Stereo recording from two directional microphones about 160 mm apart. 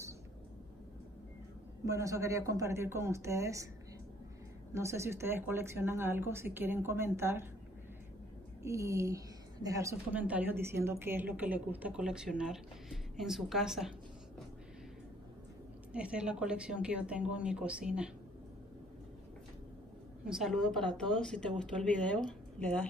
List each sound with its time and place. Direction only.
1.9 s speech: 20° right (ahead or behind)
4.7 s a woman's voice: 15° right (ahead or behind)
8.6 s a woman's voice: 20° right (ahead or behind); by 13.9 s 5° right (ahead or behind)
15.9 s a woman's voice: 5° right (ahead or behind)
20.2 s speech: 5° right (ahead or behind)